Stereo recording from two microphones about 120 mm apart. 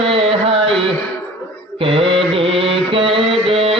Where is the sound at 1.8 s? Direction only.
50° right (ahead or behind).